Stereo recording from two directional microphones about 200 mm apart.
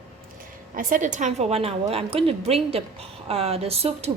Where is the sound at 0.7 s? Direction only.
40° right (ahead or behind).